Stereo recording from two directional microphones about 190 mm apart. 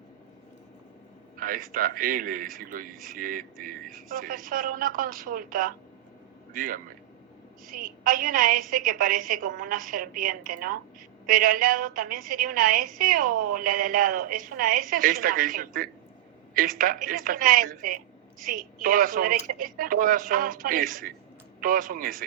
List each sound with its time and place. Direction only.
1.4 s a woman's voice: 45° right (ahead or behind)